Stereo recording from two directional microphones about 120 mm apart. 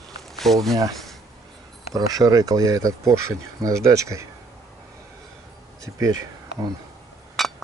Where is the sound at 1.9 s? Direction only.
30° right (ahead or behind).